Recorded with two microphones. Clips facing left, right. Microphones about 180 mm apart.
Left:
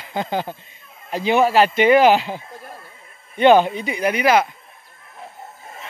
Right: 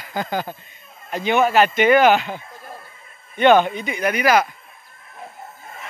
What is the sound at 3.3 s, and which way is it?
A man's voice, 30° left (ahead or behind).